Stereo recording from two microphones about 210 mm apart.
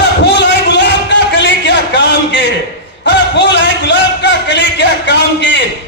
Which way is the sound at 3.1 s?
55° left (ahead or behind).